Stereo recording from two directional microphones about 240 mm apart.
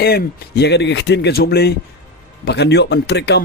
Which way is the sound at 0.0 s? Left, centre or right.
Left.